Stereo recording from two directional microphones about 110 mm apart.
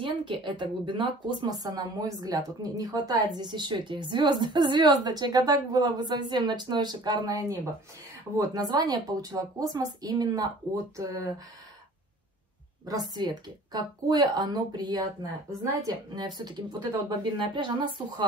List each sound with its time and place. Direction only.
0.0 s speech: 50° right (ahead or behind)
1.5 s a woman's voice: 35° right (ahead or behind)
12.8 s a woman's voice: 35° right (ahead or behind)